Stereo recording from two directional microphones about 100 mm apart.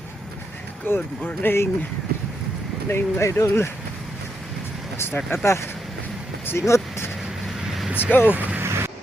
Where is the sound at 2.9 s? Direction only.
25° left (ahead or behind).